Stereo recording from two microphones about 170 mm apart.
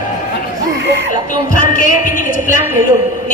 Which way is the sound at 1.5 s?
55° left (ahead or behind).